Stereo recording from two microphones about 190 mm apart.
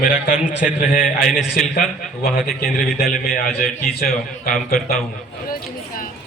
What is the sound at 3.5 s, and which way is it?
Speech, centre (ahead or behind).